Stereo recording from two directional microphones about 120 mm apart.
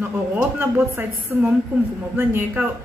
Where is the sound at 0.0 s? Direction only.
15° right (ahead or behind).